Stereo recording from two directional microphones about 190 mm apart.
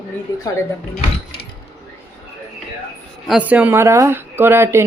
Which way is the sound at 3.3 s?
5° right (ahead or behind).